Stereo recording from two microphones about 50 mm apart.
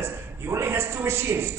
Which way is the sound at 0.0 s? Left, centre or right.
Right.